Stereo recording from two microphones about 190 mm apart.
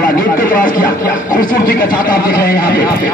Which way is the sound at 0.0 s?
50° left (ahead or behind).